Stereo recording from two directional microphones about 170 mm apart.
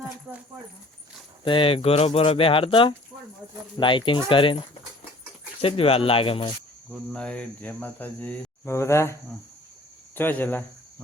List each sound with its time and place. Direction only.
1.5 s speech: 30° left (ahead or behind)
5.6 s speech: 35° left (ahead or behind)
6.9 s cricket: 5° left (ahead or behind)
10.2 s cricket: 10° left (ahead or behind)